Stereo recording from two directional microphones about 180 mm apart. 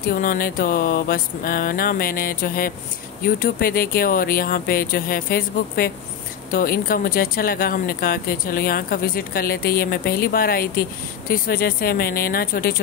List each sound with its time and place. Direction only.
0.0 s speech: 50° left (ahead or behind)